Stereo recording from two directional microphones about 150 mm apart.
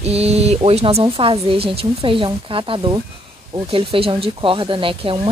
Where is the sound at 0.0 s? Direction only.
45° right (ahead or behind).